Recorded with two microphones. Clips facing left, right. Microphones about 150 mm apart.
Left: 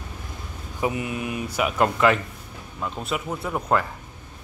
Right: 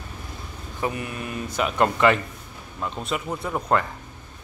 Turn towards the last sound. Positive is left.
turn(degrees=5)  # may be behind; listen again after turning